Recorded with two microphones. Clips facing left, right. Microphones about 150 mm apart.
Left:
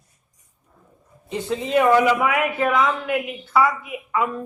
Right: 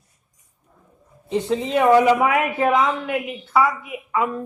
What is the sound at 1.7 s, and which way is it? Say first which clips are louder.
Speech: right 1 dB; 25° right (ahead or behind).